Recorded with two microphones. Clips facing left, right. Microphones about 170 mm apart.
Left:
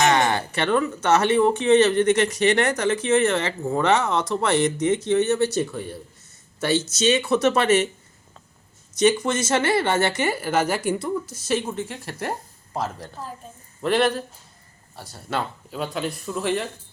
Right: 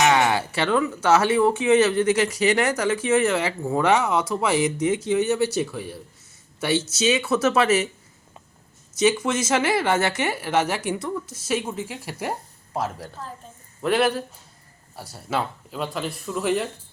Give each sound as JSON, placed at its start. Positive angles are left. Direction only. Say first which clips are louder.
{"t": 0.0, "sound": "speech", "louder": "even", "side_deg": -5}
{"t": 9.0, "sound": "speech", "louder": "left 1 dB", "side_deg": -5}